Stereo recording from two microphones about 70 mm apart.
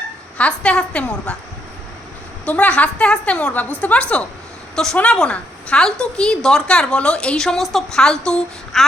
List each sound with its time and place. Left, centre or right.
0.3 s a woman's voice: centre
2.4 s a woman's voice: centre